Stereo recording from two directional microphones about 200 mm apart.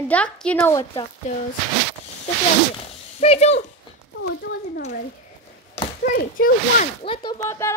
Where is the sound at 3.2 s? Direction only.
30° left (ahead or behind).